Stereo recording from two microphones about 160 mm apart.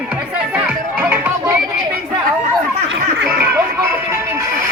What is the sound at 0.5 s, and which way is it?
Music, 10° right (ahead or behind).